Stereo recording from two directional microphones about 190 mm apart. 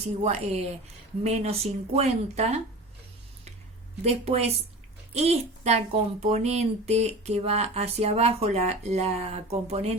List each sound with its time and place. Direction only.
0.2 s speech: 35° right (ahead or behind)
4.0 s speech: 35° right (ahead or behind)